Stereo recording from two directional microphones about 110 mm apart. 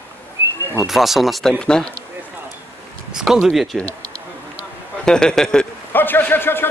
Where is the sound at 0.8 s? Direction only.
Centre (ahead or behind).